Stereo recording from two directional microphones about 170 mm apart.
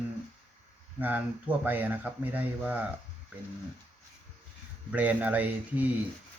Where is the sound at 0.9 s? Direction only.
10° right (ahead or behind).